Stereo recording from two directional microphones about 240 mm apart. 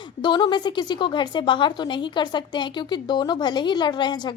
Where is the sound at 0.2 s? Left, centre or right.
Centre.